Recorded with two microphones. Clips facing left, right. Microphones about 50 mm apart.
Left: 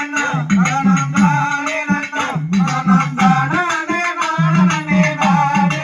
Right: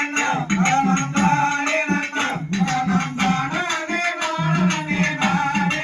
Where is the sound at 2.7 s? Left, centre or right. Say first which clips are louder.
Left 6 dB; left.